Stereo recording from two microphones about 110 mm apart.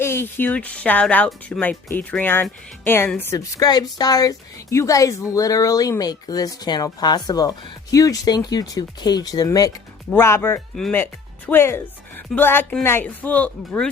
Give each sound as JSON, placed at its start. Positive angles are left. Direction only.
{"t": 0.0, "sound": "speech", "side_deg": 20}
{"t": 3.3, "sound": "speech", "side_deg": 35}